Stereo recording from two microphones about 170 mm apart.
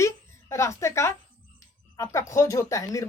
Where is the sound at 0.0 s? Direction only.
15° left (ahead or behind).